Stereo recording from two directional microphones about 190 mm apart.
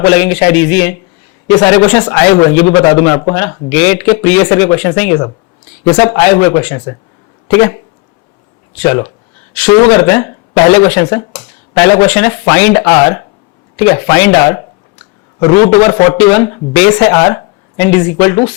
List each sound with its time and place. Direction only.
0.0 s speech: 10° left (ahead or behind)
8.8 s a man's voice: 15° left (ahead or behind)